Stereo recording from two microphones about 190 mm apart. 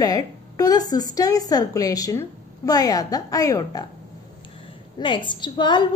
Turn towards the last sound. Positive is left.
turn(degrees=25)  # may be behind; listen again after turning